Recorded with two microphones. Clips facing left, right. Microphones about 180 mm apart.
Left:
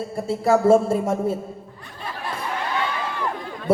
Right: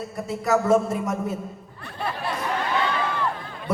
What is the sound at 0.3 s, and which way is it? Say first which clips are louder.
A woman's voice: left 4 dB; 30° left (ahead or behind).